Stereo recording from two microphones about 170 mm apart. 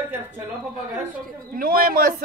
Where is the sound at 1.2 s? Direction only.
55° right (ahead or behind).